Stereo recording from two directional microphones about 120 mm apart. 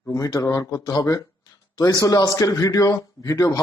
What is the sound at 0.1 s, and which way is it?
A man's voice, 30° left (ahead or behind).